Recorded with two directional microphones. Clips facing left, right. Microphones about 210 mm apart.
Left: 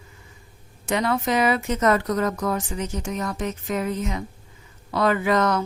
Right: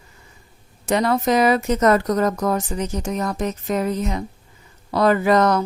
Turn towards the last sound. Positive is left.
turn(degrees=-40)  # may be behind; listen again after turning